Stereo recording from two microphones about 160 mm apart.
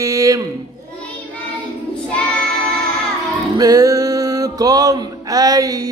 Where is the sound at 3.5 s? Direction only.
25° right (ahead or behind).